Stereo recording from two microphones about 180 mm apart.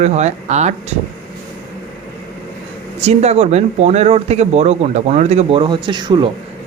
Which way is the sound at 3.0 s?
35° right (ahead or behind).